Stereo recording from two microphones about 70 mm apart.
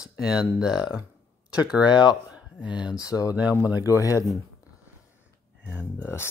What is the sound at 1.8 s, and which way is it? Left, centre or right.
Speech, left.